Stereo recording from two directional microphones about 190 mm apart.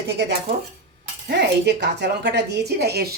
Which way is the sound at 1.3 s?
60° right (ahead or behind).